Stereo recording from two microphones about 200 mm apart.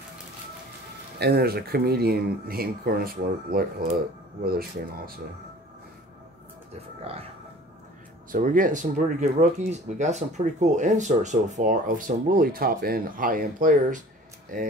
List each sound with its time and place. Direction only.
1.2 s speech: 55° right (ahead or behind)
8.3 s speech: 40° right (ahead or behind)